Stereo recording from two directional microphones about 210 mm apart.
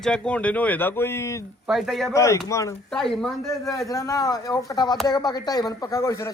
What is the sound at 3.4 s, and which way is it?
A man's voice, 15° left (ahead or behind).